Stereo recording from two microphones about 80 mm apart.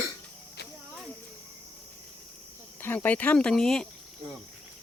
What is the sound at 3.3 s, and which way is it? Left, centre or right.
Speech, centre.